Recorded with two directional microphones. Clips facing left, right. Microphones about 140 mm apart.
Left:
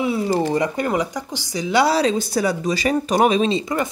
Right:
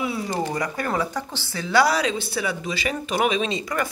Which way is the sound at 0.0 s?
25° left (ahead or behind).